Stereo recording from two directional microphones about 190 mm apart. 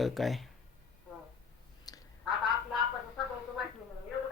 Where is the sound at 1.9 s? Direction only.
20° left (ahead or behind).